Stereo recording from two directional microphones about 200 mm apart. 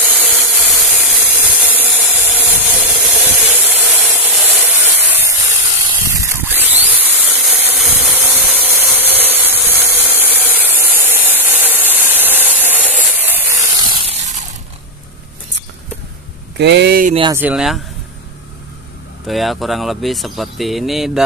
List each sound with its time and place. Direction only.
0.0 s a sound: 5° right (ahead or behind)
16.5 s speech: 60° right (ahead or behind)
17.4 s speech: 5° right (ahead or behind)
19.2 s speech: centre (ahead or behind)